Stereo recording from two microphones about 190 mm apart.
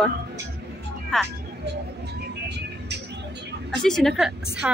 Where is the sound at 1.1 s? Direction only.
Centre (ahead or behind).